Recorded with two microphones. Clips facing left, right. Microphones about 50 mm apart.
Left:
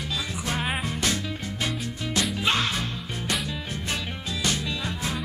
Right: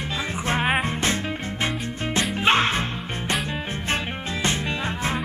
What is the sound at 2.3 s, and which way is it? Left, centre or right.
Music, right.